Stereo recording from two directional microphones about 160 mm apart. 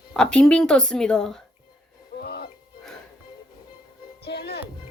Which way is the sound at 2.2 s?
80° left.